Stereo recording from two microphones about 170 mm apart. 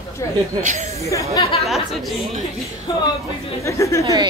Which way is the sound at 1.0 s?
20° left (ahead or behind).